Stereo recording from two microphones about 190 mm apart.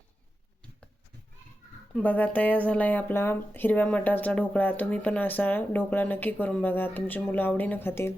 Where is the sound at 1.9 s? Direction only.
10° left (ahead or behind).